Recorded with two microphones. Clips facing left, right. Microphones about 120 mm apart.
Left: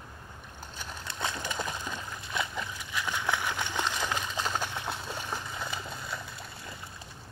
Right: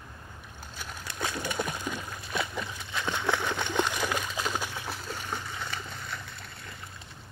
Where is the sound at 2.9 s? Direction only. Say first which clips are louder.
Right 2 dB; 25° right (ahead or behind).